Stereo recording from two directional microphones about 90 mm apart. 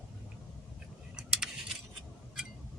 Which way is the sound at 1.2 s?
10° right (ahead or behind).